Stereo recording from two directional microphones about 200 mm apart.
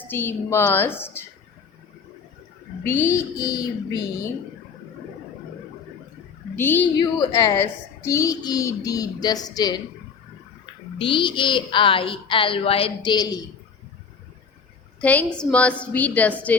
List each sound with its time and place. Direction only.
0.1 s a woman's voice: 10° left (ahead or behind)
2.8 s a woman's voice: 10° left (ahead or behind)
6.6 s a woman's voice: 10° left (ahead or behind)
7.0 s a woman's voice: 20° left (ahead or behind)
10.9 s a woman's voice: 25° left (ahead or behind)
15.0 s a woman's voice: 10° left (ahead or behind)